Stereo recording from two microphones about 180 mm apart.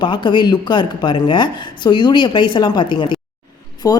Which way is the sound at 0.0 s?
25° left (ahead or behind).